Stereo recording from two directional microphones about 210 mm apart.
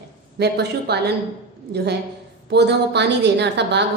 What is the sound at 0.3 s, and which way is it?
A woman's voice, 50° right (ahead or behind).